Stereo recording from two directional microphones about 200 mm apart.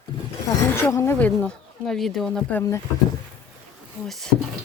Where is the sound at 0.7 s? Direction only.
15° left (ahead or behind).